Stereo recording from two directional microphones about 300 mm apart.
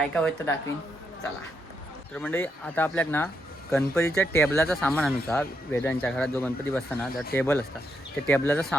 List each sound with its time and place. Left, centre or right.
0.0 s speech: centre
2.1 s speech: centre